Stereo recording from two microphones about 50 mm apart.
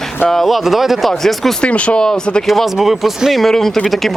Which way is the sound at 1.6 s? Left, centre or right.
Left.